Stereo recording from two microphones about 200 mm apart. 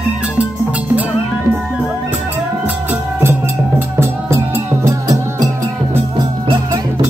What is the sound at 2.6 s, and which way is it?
Music, 10° right (ahead or behind).